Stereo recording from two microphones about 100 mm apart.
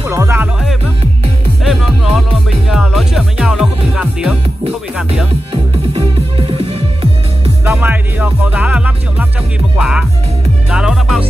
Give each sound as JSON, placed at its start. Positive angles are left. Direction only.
{"t": 0.1, "sound": "music", "side_deg": -30}
{"t": 1.6, "sound": "music", "side_deg": -5}
{"t": 5.5, "sound": "music", "side_deg": -75}
{"t": 7.6, "sound": "music", "side_deg": -25}